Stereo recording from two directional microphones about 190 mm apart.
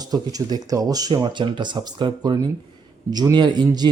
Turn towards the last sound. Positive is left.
turn(degrees=-20)  # may be behind; listen again after turning